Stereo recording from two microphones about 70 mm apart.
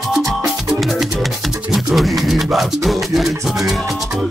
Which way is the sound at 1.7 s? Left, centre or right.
Centre.